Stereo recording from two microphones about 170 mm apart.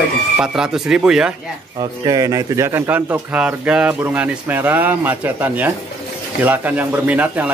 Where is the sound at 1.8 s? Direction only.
20° right (ahead or behind).